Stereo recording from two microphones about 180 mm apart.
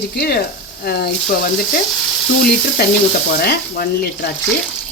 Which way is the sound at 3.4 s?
60° left (ahead or behind).